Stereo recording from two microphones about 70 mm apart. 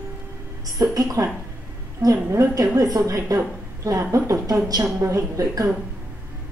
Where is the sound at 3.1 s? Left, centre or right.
Right.